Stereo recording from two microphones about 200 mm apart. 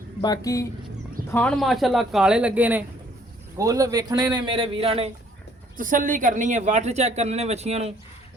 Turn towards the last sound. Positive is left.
turn(degrees=-30)  # may be behind; listen again after turning